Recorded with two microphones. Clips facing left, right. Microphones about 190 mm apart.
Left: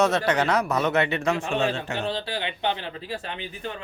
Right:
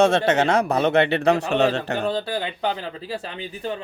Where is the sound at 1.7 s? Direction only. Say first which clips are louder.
Right 5 dB; 60° right (ahead or behind); by 3.4 s 35° right (ahead or behind).